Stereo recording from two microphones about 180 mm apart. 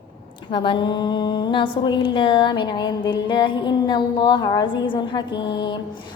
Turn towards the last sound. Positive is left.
turn(degrees=25)  # may be behind; listen again after turning